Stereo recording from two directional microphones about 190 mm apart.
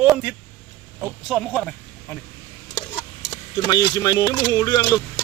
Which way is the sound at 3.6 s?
20° left (ahead or behind).